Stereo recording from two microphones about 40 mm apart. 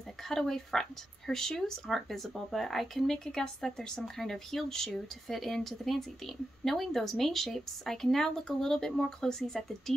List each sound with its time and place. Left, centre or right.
0.3 s speech: centre
3.3 s speech: centre